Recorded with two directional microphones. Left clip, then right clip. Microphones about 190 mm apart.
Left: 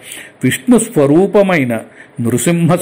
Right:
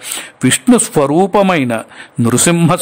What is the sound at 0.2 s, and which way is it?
A man's voice, 30° right (ahead or behind).